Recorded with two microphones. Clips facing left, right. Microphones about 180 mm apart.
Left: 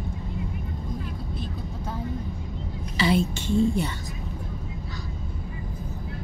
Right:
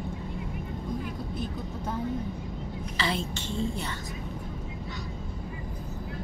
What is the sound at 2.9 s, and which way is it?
A woman's voice, 10° left (ahead or behind).